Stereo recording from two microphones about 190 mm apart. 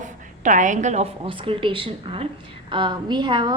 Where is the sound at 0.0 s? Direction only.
40° right (ahead or behind).